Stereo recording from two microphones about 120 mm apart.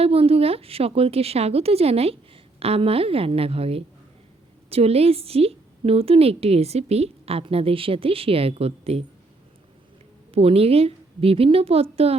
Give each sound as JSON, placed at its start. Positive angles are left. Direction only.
{"t": 0.0, "sound": "a woman's voice", "side_deg": -55}
{"t": 10.3, "sound": "a woman's voice", "side_deg": -55}